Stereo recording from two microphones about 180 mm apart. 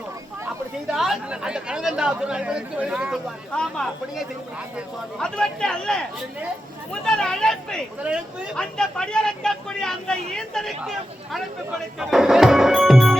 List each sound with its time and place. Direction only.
0.9 s speech: centre (ahead or behind)
11.9 s music: centre (ahead or behind)